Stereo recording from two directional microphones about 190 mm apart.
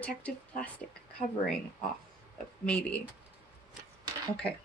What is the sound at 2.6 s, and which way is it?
Speech, 5° left (ahead or behind).